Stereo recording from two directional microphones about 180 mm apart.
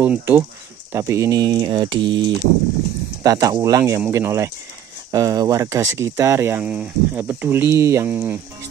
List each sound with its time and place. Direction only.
0.0 s speech: 10° right (ahead or behind)